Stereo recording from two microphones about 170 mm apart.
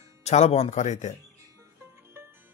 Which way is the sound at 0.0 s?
40° left (ahead or behind).